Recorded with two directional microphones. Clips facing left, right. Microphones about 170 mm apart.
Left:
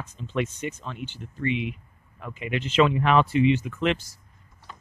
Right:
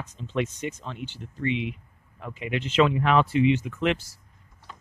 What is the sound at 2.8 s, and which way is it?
Speech, 20° left (ahead or behind).